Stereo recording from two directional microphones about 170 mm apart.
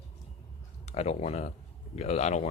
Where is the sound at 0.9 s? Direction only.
40° left (ahead or behind).